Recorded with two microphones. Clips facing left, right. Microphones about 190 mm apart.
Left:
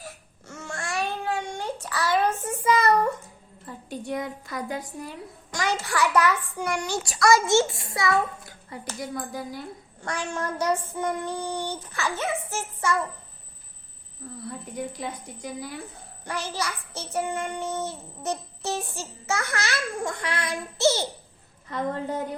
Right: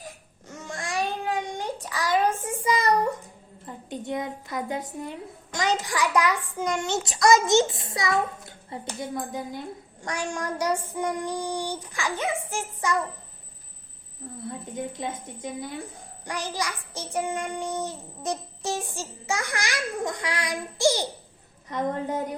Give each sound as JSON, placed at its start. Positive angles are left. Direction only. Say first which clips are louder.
{"t": 0.0, "sound": "babbling", "louder": "even", "side_deg": -15}
{"t": 3.7, "sound": "speech", "louder": "even", "side_deg": -20}
{"t": 8.9, "sound": "child singing", "louder": "right 1 dB", "side_deg": -20}
{"t": 14.2, "sound": "speech", "louder": "right 1 dB", "side_deg": -25}
{"t": 16.2, "sound": "child singing", "louder": "even", "side_deg": -15}
{"t": 21.7, "sound": "speech", "louder": "right 1 dB", "side_deg": -20}